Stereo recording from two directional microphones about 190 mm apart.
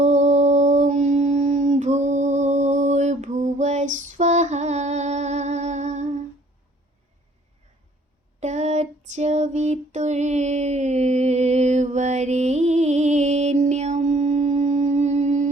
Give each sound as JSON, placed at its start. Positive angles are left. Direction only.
{"t": 0.0, "sound": "a sound", "side_deg": -40}
{"t": 3.9, "sound": "female singing", "side_deg": -40}
{"t": 8.4, "sound": "female singing", "side_deg": -35}